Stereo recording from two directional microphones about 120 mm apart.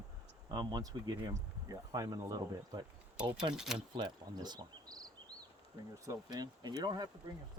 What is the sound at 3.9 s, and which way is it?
Speech, 35° right (ahead or behind).